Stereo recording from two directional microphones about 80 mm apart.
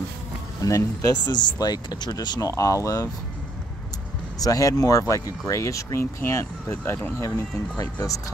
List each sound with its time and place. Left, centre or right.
0.6 s speech: left
2.5 s speech: left
4.4 s speech: left
7.2 s speech: left